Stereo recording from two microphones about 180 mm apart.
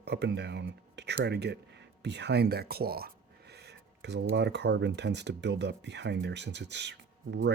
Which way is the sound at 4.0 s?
70° right (ahead or behind).